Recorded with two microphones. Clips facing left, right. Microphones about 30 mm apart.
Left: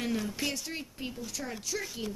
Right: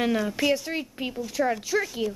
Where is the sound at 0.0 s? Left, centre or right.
Right.